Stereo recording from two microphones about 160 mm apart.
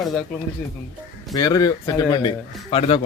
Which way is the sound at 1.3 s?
25° left (ahead or behind).